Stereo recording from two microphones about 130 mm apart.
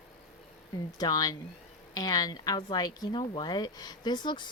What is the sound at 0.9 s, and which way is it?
Speech, 30° left (ahead or behind).